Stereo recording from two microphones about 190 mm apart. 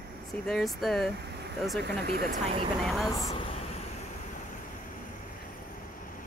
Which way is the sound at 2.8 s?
Centre (ahead or behind).